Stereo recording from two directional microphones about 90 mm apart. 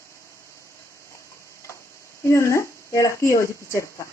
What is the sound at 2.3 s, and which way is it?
A woman's voice, 35° left (ahead or behind).